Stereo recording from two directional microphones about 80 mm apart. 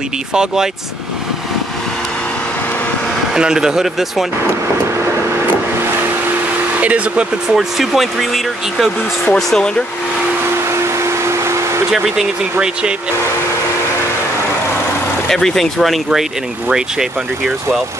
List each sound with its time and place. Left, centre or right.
0.3 s speech: centre
3.3 s speech: centre
6.8 s speech: centre
7.5 s speech: centre
9.3 s speech: centre
11.1 s a sound: right
11.9 s speech: centre
15.2 s speech: centre